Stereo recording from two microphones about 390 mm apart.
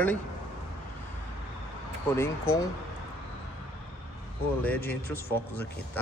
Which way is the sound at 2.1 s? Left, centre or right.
Centre.